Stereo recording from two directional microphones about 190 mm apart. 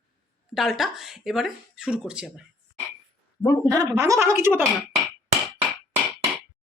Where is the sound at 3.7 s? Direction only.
15° right (ahead or behind).